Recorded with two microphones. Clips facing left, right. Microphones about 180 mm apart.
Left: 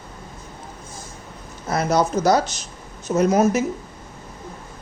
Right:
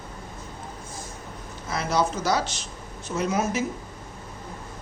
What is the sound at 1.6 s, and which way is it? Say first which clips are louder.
Speech: left 5 dB; 45° left (ahead or behind).